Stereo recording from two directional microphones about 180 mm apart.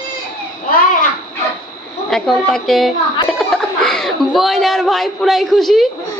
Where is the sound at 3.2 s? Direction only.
5° left (ahead or behind).